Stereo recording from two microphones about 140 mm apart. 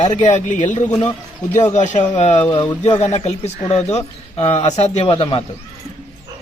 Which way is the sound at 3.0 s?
50° left (ahead or behind).